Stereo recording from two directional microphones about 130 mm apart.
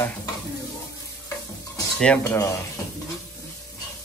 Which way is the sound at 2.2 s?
25° left (ahead or behind).